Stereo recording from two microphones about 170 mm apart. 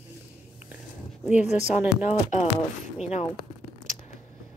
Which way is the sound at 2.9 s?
40° left (ahead or behind).